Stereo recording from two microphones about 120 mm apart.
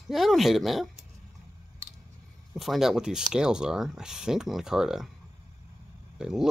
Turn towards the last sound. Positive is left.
turn(degrees=-5)  # may be behind; listen again after turning